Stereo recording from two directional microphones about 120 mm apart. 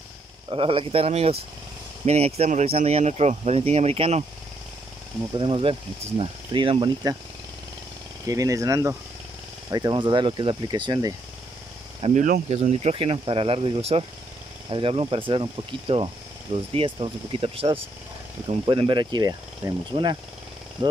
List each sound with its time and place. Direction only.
0.5 s speech: 50° right (ahead or behind)
5.3 s speech: 45° right (ahead or behind)
8.3 s speech: 30° right (ahead or behind)
12.0 s speech: 70° right (ahead or behind); by 20.2 s 40° right (ahead or behind)